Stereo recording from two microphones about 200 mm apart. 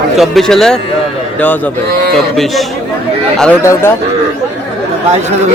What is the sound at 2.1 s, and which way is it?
A man's voice, centre (ahead or behind).